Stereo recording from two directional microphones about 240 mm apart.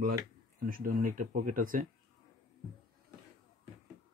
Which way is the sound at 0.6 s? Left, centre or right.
Right.